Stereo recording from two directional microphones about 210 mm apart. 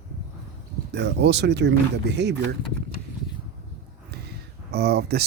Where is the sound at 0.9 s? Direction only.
55° right (ahead or behind).